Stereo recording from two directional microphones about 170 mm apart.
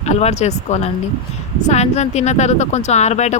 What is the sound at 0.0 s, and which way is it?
Speech, 40° left (ahead or behind).